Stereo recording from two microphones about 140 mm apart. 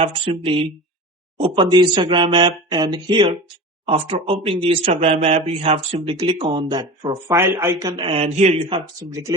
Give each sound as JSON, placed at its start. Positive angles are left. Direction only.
{"t": 0.0, "sound": "speech", "side_deg": -40}
{"t": 6.1, "sound": "speech", "side_deg": -35}
{"t": 7.3, "sound": "a man's voice", "side_deg": -15}